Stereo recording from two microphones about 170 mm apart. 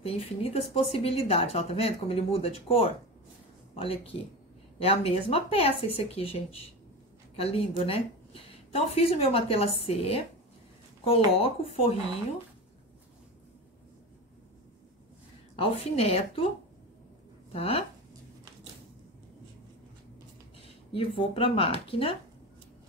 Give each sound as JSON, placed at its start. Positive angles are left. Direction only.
{"t": 0.0, "sound": "speech", "side_deg": 35}
{"t": 11.3, "sound": "speech", "side_deg": 35}
{"t": 15.5, "sound": "speech", "side_deg": 35}
{"t": 17.5, "sound": "speech", "side_deg": 35}
{"t": 20.5, "sound": "speech", "side_deg": 35}